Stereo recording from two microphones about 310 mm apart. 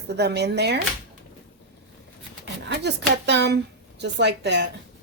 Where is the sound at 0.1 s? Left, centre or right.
Right.